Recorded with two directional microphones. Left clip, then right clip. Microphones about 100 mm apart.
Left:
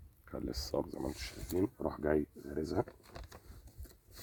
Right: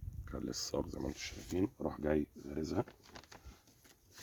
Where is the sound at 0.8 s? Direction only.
30° right (ahead or behind).